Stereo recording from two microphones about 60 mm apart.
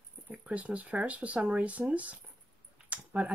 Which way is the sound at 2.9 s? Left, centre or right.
Right.